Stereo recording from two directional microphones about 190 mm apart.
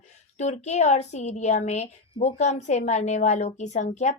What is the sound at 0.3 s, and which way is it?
A woman's voice, 35° left (ahead or behind).